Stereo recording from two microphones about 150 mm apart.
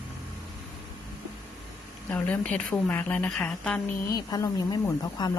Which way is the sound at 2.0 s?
10° left (ahead or behind).